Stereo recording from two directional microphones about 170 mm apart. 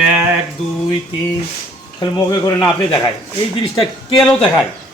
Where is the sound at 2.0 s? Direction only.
20° left (ahead or behind).